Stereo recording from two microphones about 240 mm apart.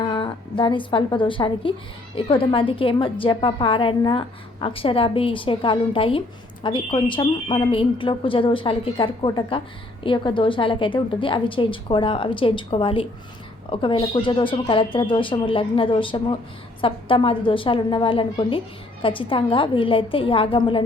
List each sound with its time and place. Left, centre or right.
0.0 s a woman's voice: centre